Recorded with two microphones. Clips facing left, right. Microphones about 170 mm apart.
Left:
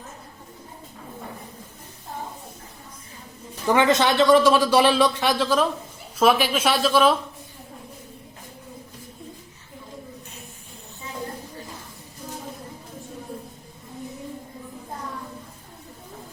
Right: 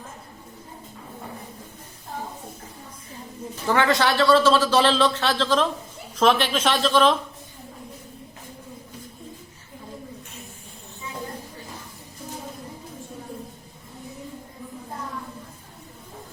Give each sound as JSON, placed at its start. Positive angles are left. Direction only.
{"t": 3.7, "sound": "a man's voice", "side_deg": 20}